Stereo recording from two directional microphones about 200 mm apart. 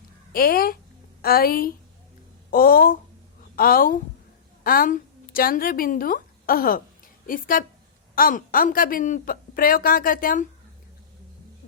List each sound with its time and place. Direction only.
0.3 s a woman's voice: 50° left (ahead or behind)